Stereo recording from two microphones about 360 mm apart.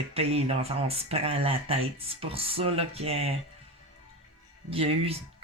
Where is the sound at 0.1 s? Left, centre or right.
Centre.